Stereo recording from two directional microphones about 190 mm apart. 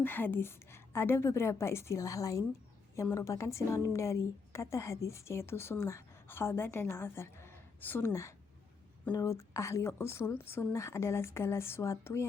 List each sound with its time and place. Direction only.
0.0 s a woman's voice: 10° left (ahead or behind)